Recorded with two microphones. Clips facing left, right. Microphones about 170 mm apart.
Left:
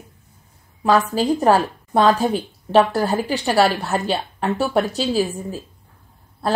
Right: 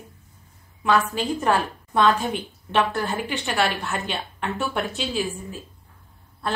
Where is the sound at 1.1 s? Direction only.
35° left (ahead or behind).